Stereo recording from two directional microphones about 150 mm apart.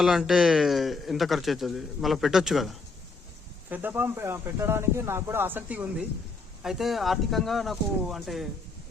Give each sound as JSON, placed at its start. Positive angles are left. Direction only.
{"t": 0.0, "sound": "speech", "side_deg": 0}
{"t": 3.7, "sound": "speech", "side_deg": -10}